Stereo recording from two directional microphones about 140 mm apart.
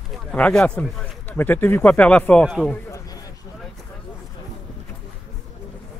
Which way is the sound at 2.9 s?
25° left (ahead or behind).